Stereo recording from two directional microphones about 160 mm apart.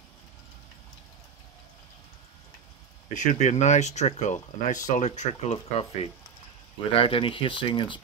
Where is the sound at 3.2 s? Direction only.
50° left (ahead or behind).